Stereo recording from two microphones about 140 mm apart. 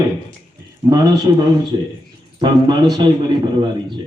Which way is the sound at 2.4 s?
30° right (ahead or behind).